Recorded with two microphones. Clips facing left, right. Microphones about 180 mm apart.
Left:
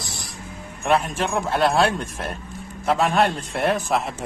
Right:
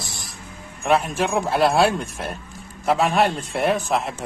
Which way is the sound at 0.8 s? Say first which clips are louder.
Right 1 dB; centre (ahead or behind).